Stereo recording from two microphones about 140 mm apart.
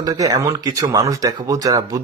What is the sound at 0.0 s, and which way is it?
Speech, 25° right (ahead or behind).